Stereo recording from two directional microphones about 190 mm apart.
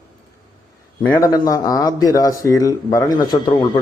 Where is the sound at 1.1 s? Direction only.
20° left (ahead or behind).